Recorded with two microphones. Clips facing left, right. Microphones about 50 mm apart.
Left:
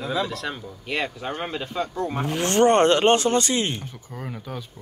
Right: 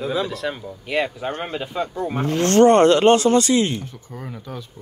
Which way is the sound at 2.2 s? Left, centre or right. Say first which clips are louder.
Right 7 dB; centre.